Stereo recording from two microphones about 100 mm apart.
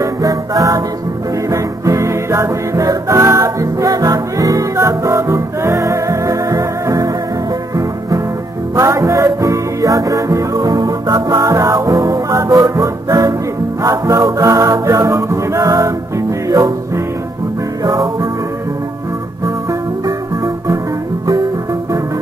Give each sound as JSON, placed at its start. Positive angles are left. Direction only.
{"t": 0.0, "sound": "music", "side_deg": -35}
{"t": 8.7, "sound": "music", "side_deg": -30}
{"t": 20.1, "sound": "music", "side_deg": -35}